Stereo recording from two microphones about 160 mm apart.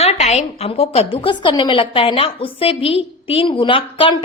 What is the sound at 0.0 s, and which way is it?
A woman's voice, 40° left (ahead or behind).